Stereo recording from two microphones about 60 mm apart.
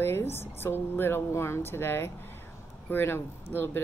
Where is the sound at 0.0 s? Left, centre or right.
Left.